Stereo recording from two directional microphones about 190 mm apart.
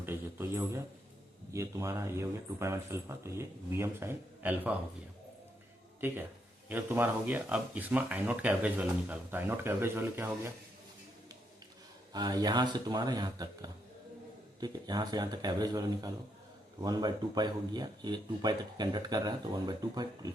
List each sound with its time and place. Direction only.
0.0 s speech: 10° right (ahead or behind)
6.7 s speech: 10° right (ahead or behind)
12.1 s speech: 20° right (ahead or behind)